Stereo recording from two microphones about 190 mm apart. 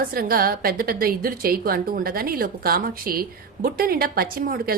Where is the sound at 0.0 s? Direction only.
50° right (ahead or behind).